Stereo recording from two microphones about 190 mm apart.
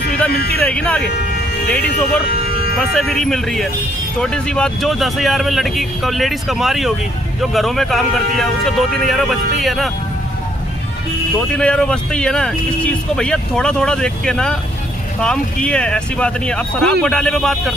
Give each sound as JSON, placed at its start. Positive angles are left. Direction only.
{"t": 0.3, "sound": "speech", "side_deg": 55}
{"t": 0.5, "sound": "speech", "side_deg": 5}
{"t": 2.7, "sound": "speech", "side_deg": 0}
{"t": 11.5, "sound": "speech", "side_deg": 5}